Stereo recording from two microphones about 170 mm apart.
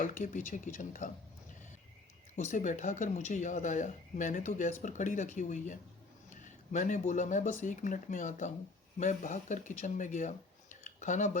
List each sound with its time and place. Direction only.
0.0 s speech: 50° left (ahead or behind)
2.3 s speech: 45° left (ahead or behind)